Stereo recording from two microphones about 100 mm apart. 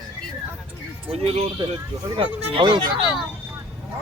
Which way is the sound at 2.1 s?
55° right (ahead or behind).